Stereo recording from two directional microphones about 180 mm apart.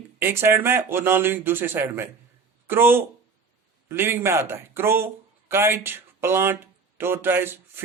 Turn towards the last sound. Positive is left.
turn(degrees=-10)  # may be behind; listen again after turning